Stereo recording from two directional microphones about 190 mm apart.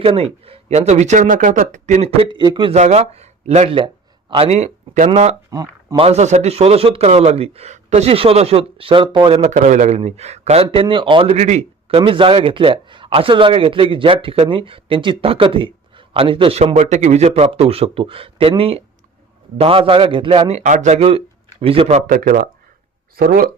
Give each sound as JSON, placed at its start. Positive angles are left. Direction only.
{"t": 0.0, "sound": "speech", "side_deg": -30}
{"t": 2.7, "sound": "speech", "side_deg": -35}
{"t": 5.5, "sound": "a sound", "side_deg": -20}
{"t": 6.0, "sound": "a man's voice", "side_deg": -35}
{"t": 22.0, "sound": "speech", "side_deg": -45}